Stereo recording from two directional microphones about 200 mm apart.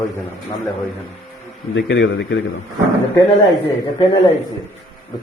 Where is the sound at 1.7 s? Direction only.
60° left (ahead or behind).